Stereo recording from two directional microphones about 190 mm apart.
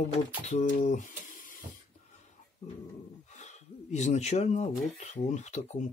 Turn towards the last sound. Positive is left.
turn(degrees=40)  # may be behind; listen again after turning